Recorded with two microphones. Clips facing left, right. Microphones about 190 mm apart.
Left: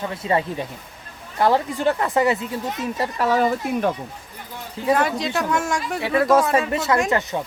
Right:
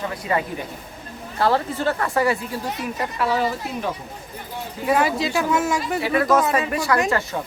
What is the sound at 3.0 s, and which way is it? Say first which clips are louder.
Speech: left 3 dB; 45° left (ahead or behind).